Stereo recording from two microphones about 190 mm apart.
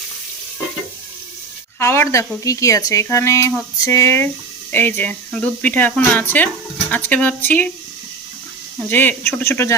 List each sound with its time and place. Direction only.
1.8 s speech: 15° left (ahead or behind)
8.9 s speech: 10° left (ahead or behind)